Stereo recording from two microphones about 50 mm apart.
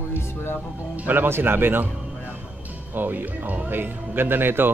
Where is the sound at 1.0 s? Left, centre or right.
Right.